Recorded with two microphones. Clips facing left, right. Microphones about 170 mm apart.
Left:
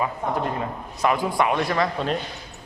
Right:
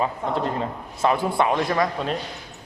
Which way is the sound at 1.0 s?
25° right (ahead or behind).